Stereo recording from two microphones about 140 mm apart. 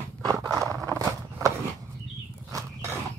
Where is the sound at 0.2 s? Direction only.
25° right (ahead or behind).